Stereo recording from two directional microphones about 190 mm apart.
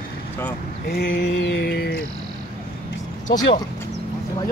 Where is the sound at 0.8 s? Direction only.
60° left (ahead or behind).